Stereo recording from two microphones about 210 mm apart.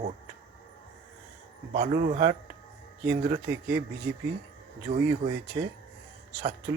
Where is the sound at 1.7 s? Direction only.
35° right (ahead or behind).